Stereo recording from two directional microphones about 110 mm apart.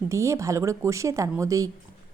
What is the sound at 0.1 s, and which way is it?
A woman's voice, 25° right (ahead or behind).